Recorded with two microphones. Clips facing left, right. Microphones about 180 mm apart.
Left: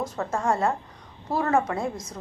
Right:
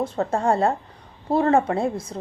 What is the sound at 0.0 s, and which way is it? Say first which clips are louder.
A woman's voice: right 5 dB; 35° right (ahead or behind).